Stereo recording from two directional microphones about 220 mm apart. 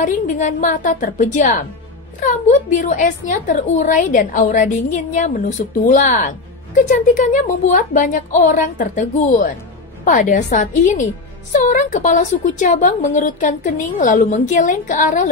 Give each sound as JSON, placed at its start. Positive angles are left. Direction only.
{"t": 0.0, "sound": "a woman's voice", "side_deg": 35}